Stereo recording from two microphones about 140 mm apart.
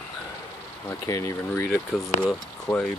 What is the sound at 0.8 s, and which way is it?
Speech, 25° left (ahead or behind).